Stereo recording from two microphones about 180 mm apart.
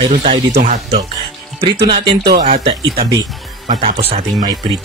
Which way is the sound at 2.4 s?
40° right (ahead or behind).